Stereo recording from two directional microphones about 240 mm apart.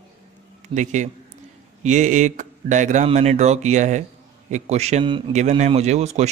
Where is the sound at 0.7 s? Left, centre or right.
Right.